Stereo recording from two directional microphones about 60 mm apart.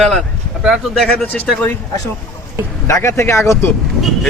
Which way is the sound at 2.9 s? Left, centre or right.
Left.